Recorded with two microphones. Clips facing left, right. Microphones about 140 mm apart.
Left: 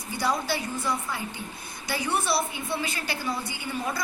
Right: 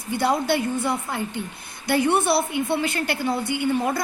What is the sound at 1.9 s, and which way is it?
Speech, 60° right (ahead or behind).